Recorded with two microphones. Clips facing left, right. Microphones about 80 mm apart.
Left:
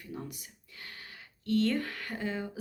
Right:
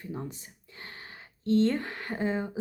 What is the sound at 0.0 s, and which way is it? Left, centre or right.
Speech, right.